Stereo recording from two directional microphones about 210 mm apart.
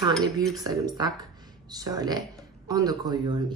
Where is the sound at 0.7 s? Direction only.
15° right (ahead or behind).